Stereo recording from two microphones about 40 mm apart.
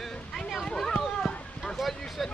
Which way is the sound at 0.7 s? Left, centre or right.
Centre.